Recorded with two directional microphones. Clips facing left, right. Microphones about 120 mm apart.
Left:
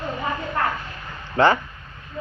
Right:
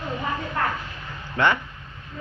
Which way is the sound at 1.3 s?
35° left (ahead or behind).